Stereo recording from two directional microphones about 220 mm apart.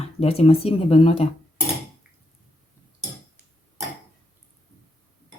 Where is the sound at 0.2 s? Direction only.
25° left (ahead or behind).